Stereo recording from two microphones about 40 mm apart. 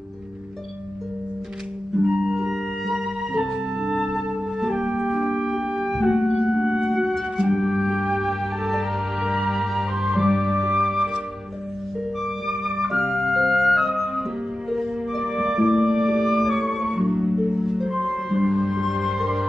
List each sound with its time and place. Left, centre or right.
2.0 s music: centre
2.3 s music: centre
6.0 s music: centre
12.4 s music: centre
15.2 s music: centre
16.9 s music: centre
17.5 s harp: right
17.7 s music: centre